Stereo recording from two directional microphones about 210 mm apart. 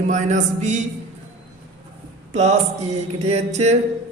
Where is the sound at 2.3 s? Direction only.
30° right (ahead or behind).